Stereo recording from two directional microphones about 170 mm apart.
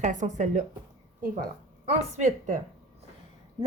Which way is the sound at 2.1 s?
45° right (ahead or behind).